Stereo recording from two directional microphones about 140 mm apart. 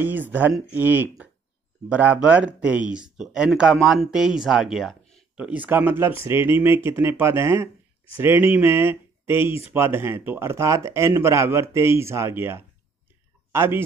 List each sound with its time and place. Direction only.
0.0 s speech: 15° right (ahead or behind)